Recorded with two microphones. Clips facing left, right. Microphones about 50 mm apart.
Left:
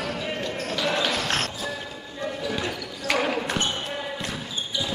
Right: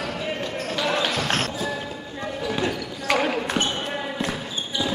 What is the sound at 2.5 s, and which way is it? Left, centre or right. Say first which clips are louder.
Basketball bounce: right 4 dB; centre.